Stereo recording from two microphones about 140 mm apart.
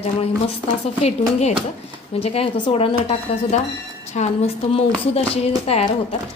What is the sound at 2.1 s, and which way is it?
A woman's voice, 45° left (ahead or behind).